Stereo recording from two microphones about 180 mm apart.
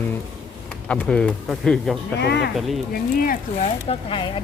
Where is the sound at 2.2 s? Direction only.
65° left (ahead or behind).